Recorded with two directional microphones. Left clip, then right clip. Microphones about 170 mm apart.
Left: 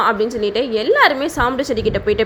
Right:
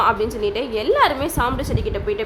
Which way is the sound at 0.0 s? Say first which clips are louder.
Left 2 dB; 15° left (ahead or behind).